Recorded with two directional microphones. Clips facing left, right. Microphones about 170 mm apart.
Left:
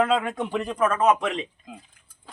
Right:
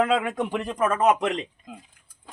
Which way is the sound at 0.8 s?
15° right (ahead or behind).